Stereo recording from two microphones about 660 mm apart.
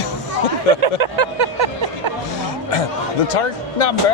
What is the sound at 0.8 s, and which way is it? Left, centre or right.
Speech, right.